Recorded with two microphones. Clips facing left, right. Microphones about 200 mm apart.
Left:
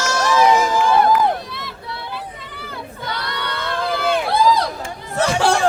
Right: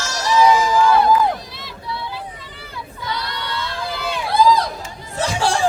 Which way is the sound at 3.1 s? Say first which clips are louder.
Even; 55° left (ahead or behind).